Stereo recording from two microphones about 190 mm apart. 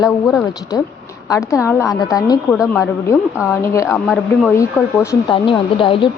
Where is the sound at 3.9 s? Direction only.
Centre (ahead or behind).